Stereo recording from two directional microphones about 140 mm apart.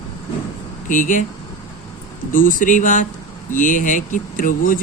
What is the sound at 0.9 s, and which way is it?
Speech, 65° left (ahead or behind).